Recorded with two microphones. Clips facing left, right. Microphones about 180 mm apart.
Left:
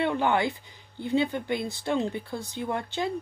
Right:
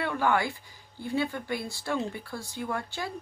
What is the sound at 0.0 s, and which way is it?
Speech, 20° left (ahead or behind).